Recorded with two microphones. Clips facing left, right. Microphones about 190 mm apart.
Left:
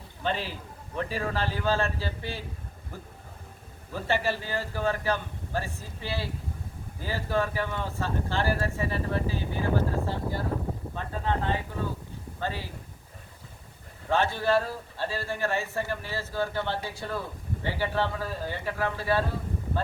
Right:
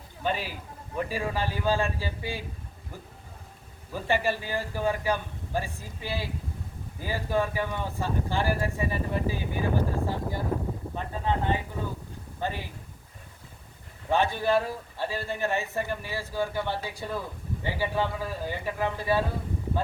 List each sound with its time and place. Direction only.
0.2 s a man's voice: 10° right (ahead or behind)
3.9 s a man's voice: 15° right (ahead or behind)
14.1 s a man's voice: 15° right (ahead or behind)